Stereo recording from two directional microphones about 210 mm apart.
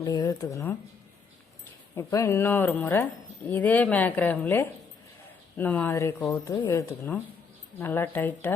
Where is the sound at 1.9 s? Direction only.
15° left (ahead or behind).